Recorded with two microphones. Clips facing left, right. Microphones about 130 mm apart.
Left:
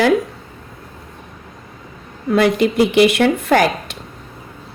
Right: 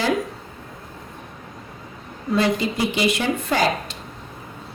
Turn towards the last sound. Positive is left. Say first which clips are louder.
# left 6 dB
turn(degrees=65)  # may be behind; listen again after turning